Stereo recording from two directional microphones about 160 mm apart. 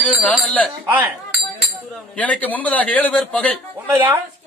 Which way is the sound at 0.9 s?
10° right (ahead or behind).